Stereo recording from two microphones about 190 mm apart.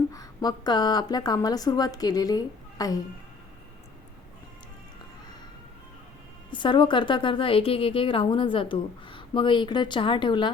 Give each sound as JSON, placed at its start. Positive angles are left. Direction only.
{"t": 0.1, "sound": "a woman's voice", "side_deg": 20}
{"t": 6.5, "sound": "a woman's voice", "side_deg": 25}